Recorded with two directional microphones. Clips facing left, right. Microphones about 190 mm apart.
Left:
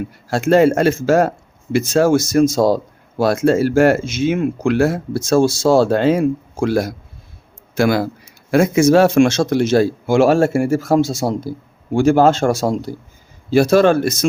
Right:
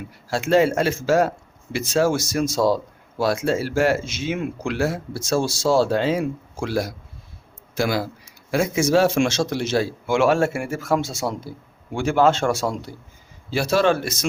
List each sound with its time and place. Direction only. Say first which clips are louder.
0.3 s a man's voice: left 5 dB; 50° left (ahead or behind)